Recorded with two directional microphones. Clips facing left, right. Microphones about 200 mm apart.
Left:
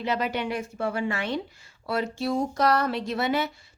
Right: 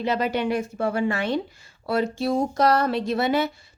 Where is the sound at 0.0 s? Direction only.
35° right (ahead or behind).